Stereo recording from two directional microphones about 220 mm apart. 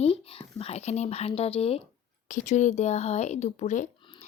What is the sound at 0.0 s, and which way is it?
A woman's voice, 25° left (ahead or behind).